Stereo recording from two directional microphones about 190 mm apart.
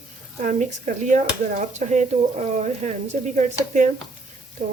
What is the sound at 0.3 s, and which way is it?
Speech, 40° right (ahead or behind).